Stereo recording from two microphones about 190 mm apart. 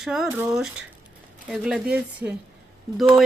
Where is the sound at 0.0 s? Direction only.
5° right (ahead or behind).